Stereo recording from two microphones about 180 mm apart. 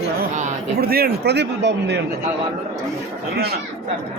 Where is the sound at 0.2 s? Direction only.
55° right (ahead or behind).